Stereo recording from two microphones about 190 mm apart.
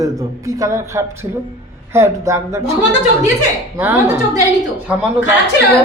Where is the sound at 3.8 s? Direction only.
10° right (ahead or behind).